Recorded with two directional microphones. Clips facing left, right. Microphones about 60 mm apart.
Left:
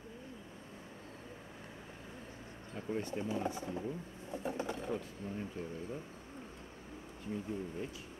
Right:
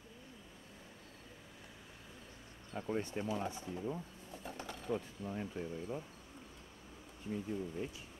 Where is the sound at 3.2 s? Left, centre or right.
Left.